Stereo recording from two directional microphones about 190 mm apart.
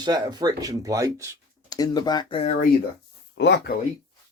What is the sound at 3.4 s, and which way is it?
Speech, 65° left (ahead or behind).